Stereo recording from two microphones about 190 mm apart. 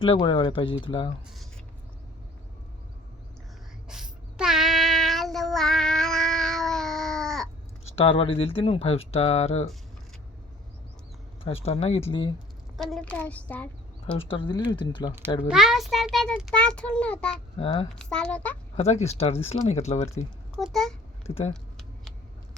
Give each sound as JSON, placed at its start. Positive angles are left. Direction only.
{"t": 0.0, "sound": "speech", "side_deg": 30}
{"t": 3.8, "sound": "child singing", "side_deg": -5}
{"t": 7.9, "sound": "speech", "side_deg": 30}
{"t": 11.4, "sound": "speech", "side_deg": 30}
{"t": 12.7, "sound": "a woman's voice", "side_deg": 0}
{"t": 14.3, "sound": "speech", "side_deg": 25}
{"t": 15.4, "sound": "a child's voice", "side_deg": 0}
{"t": 17.6, "sound": "speech", "side_deg": 30}
{"t": 17.9, "sound": "a child's voice", "side_deg": 5}
{"t": 18.8, "sound": "speech", "side_deg": 35}
{"t": 20.6, "sound": "a child's voice", "side_deg": 0}
{"t": 21.2, "sound": "speech", "side_deg": 35}
{"t": 21.5, "sound": "typing", "side_deg": 0}